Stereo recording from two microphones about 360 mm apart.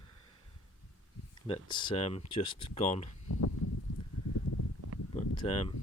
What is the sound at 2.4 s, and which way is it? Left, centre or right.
Speech, left.